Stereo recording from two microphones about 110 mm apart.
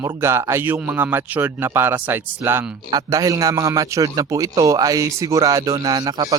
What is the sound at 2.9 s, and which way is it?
A man's voice, 30° right (ahead or behind).